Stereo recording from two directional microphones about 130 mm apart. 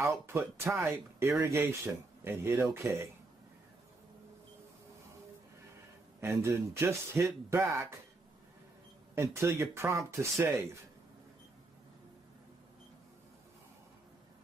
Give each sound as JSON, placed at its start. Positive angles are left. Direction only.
{"t": 0.0, "sound": "speech", "side_deg": -20}
{"t": 6.2, "sound": "speech", "side_deg": -20}
{"t": 9.1, "sound": "speech", "side_deg": -20}